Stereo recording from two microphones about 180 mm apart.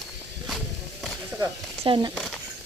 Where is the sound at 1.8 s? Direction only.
25° right (ahead or behind).